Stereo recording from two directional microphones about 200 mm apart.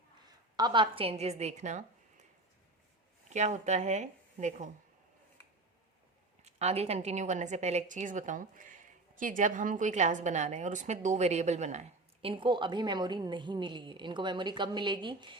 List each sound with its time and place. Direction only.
0.5 s a woman's voice: 20° right (ahead or behind); by 2.2 s 35° right (ahead or behind)
3.2 s a woman's voice: 35° right (ahead or behind)
6.4 s a woman's voice: 35° right (ahead or behind)